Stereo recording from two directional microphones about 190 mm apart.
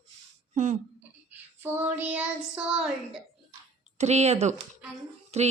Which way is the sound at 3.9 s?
35° right (ahead or behind).